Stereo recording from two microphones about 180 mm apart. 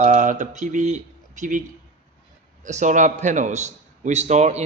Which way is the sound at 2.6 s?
45° right (ahead or behind).